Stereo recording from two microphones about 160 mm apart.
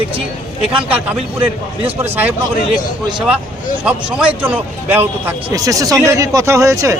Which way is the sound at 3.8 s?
5° right (ahead or behind).